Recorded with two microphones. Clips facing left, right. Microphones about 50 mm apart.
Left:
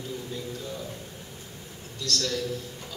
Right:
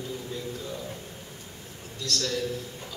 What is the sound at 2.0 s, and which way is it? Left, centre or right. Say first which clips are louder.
Speech: even; centre.